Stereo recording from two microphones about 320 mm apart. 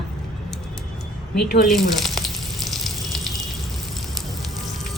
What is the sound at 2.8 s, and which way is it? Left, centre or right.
Water, centre.